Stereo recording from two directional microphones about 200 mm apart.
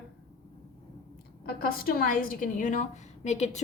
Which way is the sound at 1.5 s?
50° left (ahead or behind).